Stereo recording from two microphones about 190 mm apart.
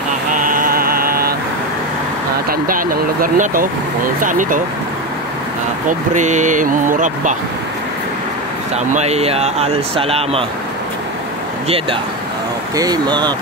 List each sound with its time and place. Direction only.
0.3 s mantra: 45° right (ahead or behind)
2.6 s speech: 50° right (ahead or behind)
5.9 s speech: 40° right (ahead or behind)
8.9 s speech: 35° right (ahead or behind)
12.7 s speech: 20° right (ahead or behind)